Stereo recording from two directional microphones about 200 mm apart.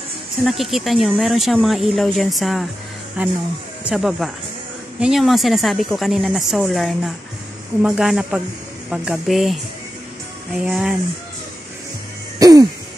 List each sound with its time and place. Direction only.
0.5 s speech: centre (ahead or behind)
12.4 s throat clearing: 20° right (ahead or behind)